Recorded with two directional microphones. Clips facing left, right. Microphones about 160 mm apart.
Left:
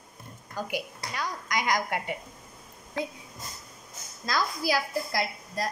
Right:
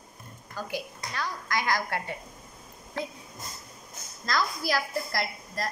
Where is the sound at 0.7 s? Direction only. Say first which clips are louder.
Left 1 dB; 15° left (ahead or behind).